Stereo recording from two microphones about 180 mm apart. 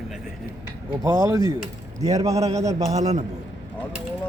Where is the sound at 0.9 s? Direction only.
20° right (ahead or behind).